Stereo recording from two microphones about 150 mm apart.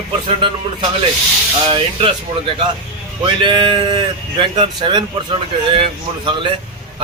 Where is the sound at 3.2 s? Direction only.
30° right (ahead or behind).